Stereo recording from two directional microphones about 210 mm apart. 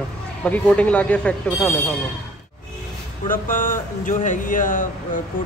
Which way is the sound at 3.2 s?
40° left (ahead or behind).